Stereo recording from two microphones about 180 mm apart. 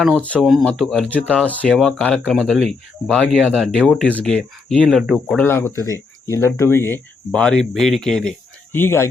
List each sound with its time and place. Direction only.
0.3 s speech: centre (ahead or behind)